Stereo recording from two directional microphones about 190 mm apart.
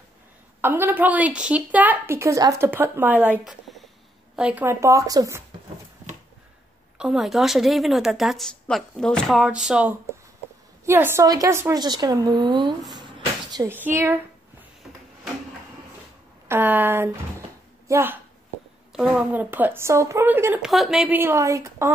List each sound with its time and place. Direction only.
0.6 s a woman's voice: 10° right (ahead or behind)
7.0 s a woman's voice: centre (ahead or behind)
16.4 s a woman's voice: 10° right (ahead or behind)